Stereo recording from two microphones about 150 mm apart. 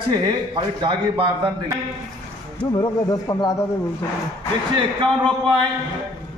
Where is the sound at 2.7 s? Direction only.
25° left (ahead or behind).